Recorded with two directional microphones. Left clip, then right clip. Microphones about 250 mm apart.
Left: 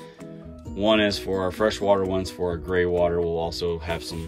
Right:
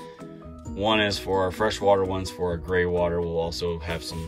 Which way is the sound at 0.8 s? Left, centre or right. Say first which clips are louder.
Left 2 dB; centre.